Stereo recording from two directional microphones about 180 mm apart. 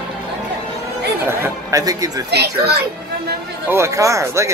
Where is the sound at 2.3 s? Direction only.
65° right (ahead or behind).